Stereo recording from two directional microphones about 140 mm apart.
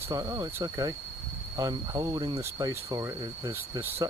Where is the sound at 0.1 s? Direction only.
25° right (ahead or behind).